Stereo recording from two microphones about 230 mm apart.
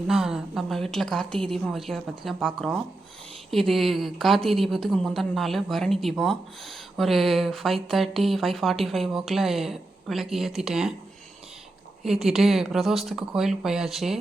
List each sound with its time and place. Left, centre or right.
0.1 s a woman's voice: centre
12.0 s a woman's voice: centre